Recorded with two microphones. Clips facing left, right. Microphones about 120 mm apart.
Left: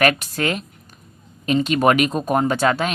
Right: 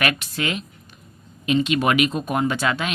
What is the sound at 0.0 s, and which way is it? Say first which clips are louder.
Speech: left 5 dB; 40° left (ahead or behind).